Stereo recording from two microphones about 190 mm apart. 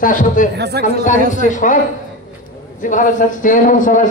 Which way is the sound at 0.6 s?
60° right (ahead or behind).